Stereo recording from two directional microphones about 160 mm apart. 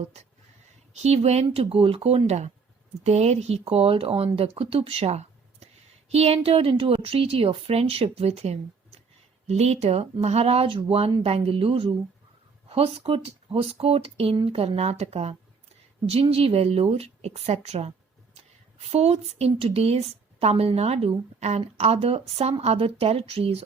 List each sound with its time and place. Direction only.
1.0 s a woman's voice: 40° right (ahead or behind)